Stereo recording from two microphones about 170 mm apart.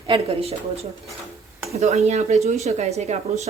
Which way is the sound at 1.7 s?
40° right (ahead or behind).